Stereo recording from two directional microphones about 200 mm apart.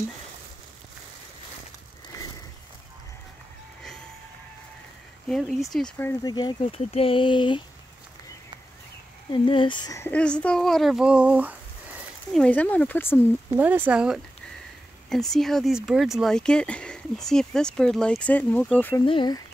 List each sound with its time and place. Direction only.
5.3 s speech: centre (ahead or behind); by 7.6 s 25° left (ahead or behind)
9.3 s speech: 25° left (ahead or behind); by 12.4 s 5° right (ahead or behind)
12.4 s speech: 10° left (ahead or behind)
13.5 s speech: 10° right (ahead or behind); by 19.0 s 10° left (ahead or behind)
19.0 s speech: 25° left (ahead or behind)